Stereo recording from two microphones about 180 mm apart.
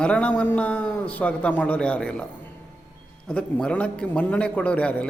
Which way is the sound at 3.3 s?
5° left (ahead or behind).